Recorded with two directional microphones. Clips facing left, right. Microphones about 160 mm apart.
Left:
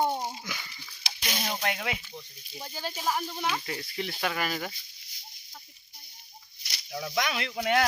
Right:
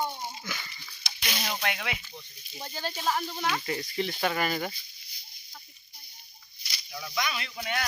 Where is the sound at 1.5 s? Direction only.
35° left (ahead or behind).